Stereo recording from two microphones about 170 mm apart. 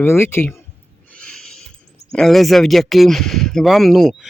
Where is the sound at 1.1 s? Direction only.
5° left (ahead or behind).